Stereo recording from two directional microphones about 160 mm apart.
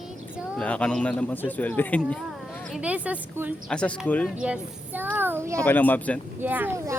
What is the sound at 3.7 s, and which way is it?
Speech, 5° left (ahead or behind).